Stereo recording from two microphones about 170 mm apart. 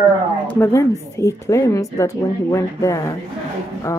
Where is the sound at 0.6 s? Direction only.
15° left (ahead or behind).